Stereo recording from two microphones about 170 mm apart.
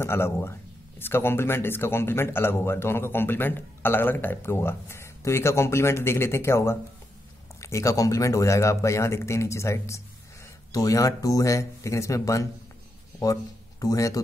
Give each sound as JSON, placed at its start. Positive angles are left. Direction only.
{"t": 0.0, "sound": "speech", "side_deg": 15}